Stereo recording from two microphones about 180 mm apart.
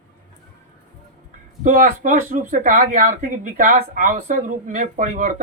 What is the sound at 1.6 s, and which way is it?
Speech, 50° right (ahead or behind).